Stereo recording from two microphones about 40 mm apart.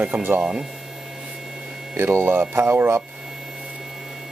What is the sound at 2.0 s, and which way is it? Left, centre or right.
Speech, right.